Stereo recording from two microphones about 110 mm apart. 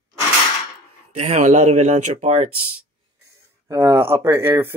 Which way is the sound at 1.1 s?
85° right.